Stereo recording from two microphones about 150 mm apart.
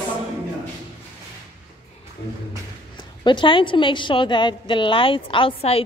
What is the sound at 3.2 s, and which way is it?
A woman's voice, 30° left (ahead or behind).